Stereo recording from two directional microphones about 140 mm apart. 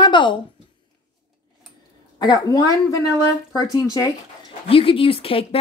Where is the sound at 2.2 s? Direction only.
25° left (ahead or behind).